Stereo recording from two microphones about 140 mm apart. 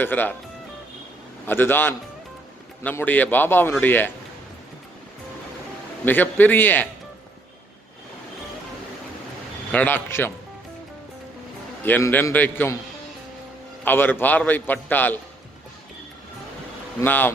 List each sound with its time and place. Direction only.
0.0 s a man's voice: 15° left (ahead or behind)
1.5 s a man's voice: 15° left (ahead or behind)
6.1 s a man's voice: 15° left (ahead or behind)
9.7 s a man's voice: 15° left (ahead or behind)
11.8 s a man's voice: 15° left (ahead or behind)
13.8 s a man's voice: 15° left (ahead or behind)
17.0 s a man's voice: 15° left (ahead or behind)